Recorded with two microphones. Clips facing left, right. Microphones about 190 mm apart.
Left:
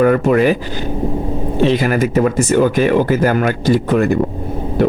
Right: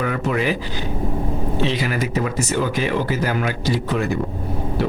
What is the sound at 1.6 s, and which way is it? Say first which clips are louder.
A man's voice: left 10 dB; 50° left (ahead or behind).